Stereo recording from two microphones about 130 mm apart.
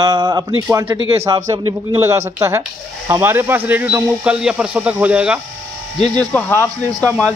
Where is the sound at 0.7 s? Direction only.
20° right (ahead or behind).